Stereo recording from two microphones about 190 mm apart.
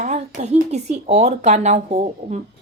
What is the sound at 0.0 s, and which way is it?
A woman's voice, 35° right (ahead or behind).